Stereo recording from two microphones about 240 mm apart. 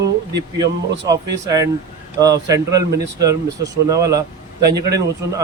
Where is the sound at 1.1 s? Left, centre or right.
Centre.